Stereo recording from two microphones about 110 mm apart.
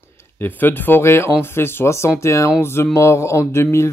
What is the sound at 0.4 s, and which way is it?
Speech, 15° left (ahead or behind).